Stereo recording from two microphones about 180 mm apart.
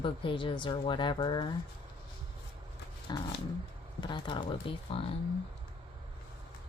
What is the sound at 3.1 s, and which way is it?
A woman's voice, 25° left (ahead or behind).